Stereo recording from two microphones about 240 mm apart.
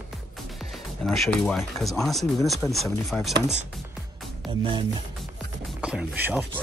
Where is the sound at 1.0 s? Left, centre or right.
Centre.